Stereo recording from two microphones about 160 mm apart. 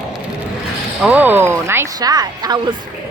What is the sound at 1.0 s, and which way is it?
Speech, 10° right (ahead or behind).